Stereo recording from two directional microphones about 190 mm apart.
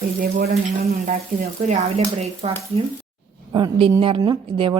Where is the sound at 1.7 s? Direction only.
35° right (ahead or behind).